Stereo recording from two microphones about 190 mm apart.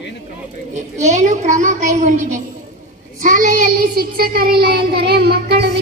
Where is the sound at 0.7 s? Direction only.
40° right (ahead or behind).